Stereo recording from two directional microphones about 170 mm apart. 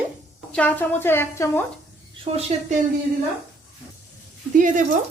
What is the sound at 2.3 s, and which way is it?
Speech, 40° right (ahead or behind).